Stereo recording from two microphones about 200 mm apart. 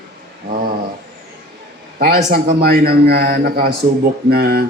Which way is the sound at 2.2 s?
35° right (ahead or behind).